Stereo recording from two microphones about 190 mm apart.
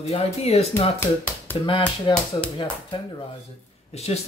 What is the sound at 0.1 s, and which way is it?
Speech, 35° left (ahead or behind).